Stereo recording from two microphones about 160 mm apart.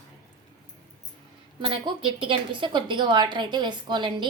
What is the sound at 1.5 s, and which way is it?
A woman's voice, 30° right (ahead or behind).